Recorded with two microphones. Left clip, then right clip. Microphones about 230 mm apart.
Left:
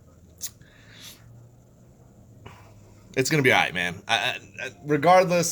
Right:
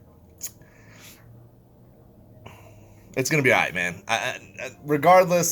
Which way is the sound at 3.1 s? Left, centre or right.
Centre.